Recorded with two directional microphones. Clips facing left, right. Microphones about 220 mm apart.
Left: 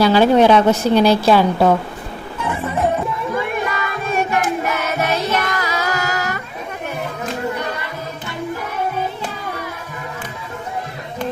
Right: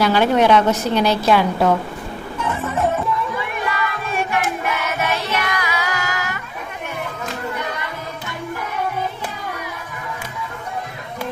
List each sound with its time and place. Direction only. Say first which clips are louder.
0.0 s a woman's voice: left 4 dB; 30° left (ahead or behind)
3.3 s music: left 3 dB; 45° left (ahead or behind)